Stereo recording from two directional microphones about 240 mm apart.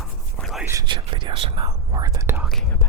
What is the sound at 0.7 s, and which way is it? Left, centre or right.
Speech, centre.